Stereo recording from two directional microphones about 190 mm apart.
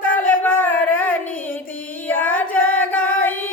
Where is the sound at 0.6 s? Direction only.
10° left (ahead or behind).